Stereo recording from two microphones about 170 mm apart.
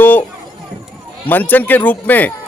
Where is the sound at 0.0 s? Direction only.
10° left (ahead or behind).